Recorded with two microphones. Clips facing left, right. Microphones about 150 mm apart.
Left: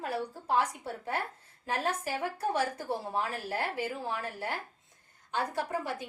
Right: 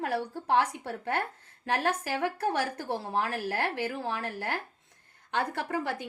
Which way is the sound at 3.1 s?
80° right.